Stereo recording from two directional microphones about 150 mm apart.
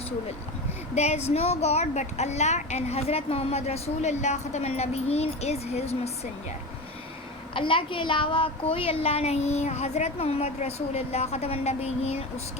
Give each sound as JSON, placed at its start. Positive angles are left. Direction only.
{"t": 0.9, "sound": "a woman's voice", "side_deg": 45}
{"t": 7.5, "sound": "a woman's voice", "side_deg": 35}